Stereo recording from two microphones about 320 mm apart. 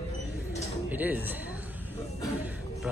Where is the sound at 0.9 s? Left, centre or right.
Centre.